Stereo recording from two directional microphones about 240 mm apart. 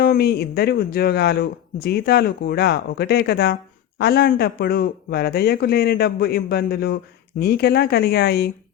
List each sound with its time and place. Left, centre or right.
0.0 s speech: left